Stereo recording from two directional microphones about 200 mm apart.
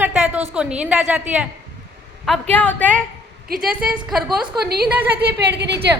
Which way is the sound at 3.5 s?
45° right (ahead or behind).